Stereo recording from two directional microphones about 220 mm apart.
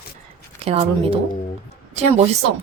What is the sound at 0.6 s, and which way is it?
Speech, 25° right (ahead or behind).